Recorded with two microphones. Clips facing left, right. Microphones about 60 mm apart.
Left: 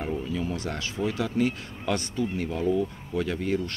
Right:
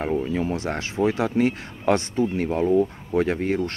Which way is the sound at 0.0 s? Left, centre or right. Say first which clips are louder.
Right 6 dB; right.